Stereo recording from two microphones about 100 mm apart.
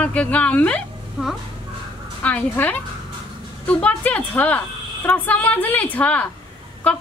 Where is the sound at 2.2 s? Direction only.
15° left (ahead or behind).